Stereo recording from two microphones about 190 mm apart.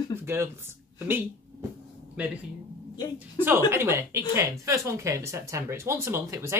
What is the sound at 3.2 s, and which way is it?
Speech, 10° right (ahead or behind).